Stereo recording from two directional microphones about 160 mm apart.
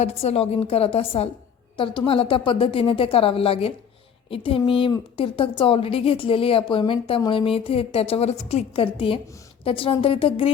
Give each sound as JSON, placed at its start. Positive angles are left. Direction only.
{"t": 0.0, "sound": "a woman's voice", "side_deg": 40}